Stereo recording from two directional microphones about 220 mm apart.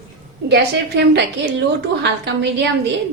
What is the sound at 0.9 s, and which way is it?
Speech, 50° right (ahead or behind).